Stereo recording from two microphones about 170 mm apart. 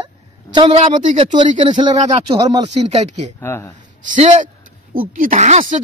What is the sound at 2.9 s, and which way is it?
Speech, 40° right (ahead or behind).